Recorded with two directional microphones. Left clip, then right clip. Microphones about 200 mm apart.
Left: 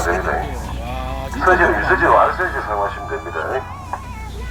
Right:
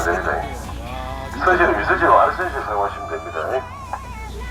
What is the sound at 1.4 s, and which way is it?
Neigh, 55° right (ahead or behind).